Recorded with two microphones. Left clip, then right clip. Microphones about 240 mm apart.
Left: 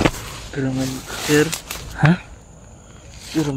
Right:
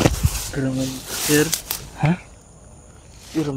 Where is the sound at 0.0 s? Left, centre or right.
Right.